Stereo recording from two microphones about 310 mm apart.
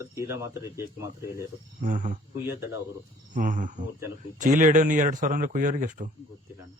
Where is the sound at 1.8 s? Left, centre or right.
Right.